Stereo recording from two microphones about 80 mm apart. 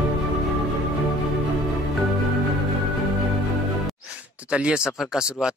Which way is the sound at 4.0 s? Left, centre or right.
Centre.